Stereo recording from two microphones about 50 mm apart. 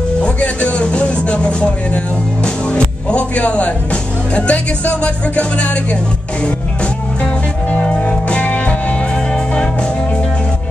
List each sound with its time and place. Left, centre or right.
0.2 s music: left
7.7 s music: left
9.1 s music: centre